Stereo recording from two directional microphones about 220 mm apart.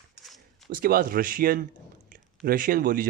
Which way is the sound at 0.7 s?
40° right (ahead or behind).